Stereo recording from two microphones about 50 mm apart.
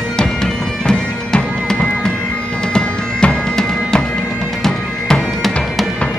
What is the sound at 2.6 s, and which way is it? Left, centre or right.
Music, centre.